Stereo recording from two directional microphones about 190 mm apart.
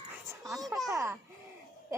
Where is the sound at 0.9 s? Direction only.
15° right (ahead or behind).